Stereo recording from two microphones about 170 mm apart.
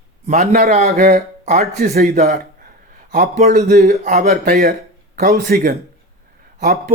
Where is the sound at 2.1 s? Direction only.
50° right (ahead or behind).